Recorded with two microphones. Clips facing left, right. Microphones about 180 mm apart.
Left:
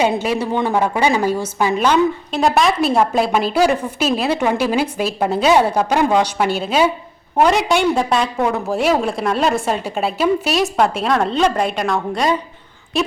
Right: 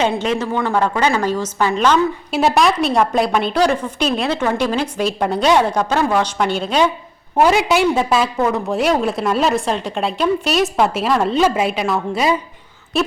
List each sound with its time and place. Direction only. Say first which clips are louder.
0.0 s a woman's voice: left 1 dB; 10° left (ahead or behind)
2.3 s a woman's voice: right 3 dB; centre (ahead or behind)